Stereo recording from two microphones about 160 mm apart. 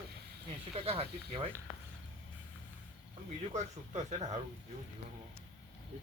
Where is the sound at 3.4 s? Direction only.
45° right (ahead or behind).